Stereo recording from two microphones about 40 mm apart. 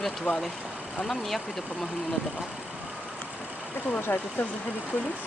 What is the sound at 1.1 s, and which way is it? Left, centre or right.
Speech, centre.